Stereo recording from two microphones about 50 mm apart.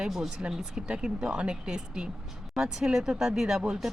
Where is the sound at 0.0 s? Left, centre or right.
Centre.